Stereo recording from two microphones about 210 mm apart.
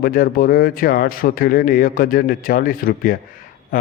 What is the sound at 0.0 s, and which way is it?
A man's voice, 45° left (ahead or behind).